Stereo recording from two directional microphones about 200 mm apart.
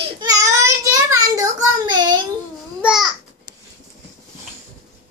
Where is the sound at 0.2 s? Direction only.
15° right (ahead or behind).